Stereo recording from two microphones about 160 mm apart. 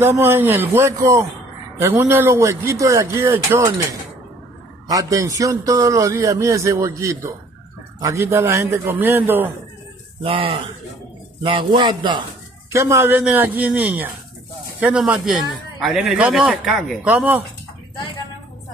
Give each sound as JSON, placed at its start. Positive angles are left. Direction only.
{"t": 0.0, "sound": "a man's voice", "side_deg": -15}
{"t": 4.8, "sound": "a man's voice", "side_deg": -20}
{"t": 10.2, "sound": "a man's voice", "side_deg": -35}
{"t": 12.7, "sound": "a man's voice", "side_deg": -15}